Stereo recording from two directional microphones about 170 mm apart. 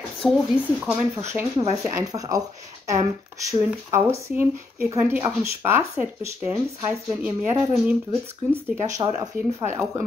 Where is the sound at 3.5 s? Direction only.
15° right (ahead or behind).